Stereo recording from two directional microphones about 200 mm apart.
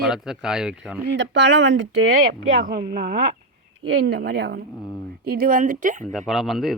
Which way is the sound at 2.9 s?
50° right (ahead or behind).